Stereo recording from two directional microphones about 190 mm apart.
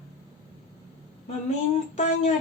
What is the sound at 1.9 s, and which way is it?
Speech, 40° left (ahead or behind).